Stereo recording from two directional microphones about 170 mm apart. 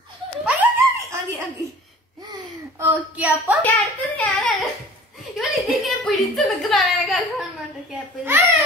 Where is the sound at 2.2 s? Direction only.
25° right (ahead or behind).